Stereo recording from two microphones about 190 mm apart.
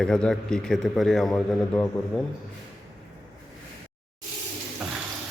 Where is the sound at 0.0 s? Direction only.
5° left (ahead or behind).